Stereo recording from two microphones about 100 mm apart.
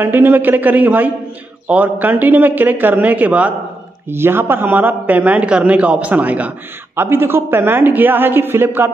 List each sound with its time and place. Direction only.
0.0 s a man's voice: 20° right (ahead or behind)